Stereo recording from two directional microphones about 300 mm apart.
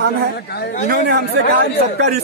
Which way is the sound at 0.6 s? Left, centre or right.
Left.